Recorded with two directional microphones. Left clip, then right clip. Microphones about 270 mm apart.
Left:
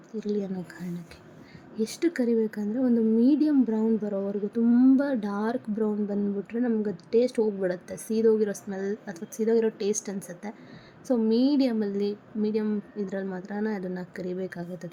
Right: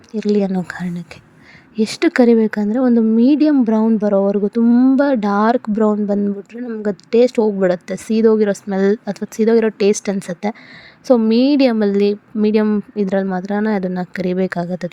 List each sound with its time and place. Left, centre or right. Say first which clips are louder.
0.1 s speech: right 13 dB; right